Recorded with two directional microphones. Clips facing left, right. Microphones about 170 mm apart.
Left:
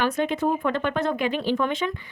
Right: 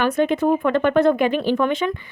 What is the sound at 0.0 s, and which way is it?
Speech, 55° right (ahead or behind).